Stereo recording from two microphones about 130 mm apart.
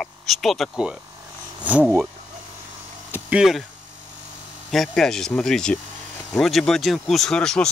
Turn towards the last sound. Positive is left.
turn(degrees=5)  # may be behind; listen again after turning